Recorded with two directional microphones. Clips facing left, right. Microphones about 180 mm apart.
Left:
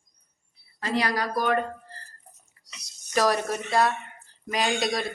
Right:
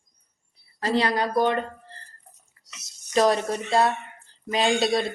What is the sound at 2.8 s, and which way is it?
A woman's voice, 25° right (ahead or behind).